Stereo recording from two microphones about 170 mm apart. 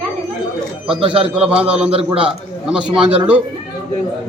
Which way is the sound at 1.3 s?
5° right (ahead or behind).